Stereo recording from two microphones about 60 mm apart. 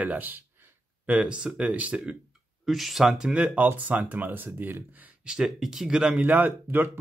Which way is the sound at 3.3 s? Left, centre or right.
Right.